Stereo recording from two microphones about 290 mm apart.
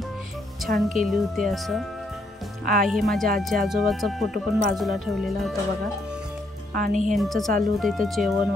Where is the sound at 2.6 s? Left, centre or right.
Right.